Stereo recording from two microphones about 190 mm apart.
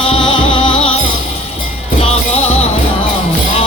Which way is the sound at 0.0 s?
30° left (ahead or behind).